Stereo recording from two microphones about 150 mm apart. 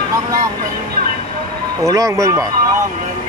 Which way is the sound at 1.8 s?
20° right (ahead or behind).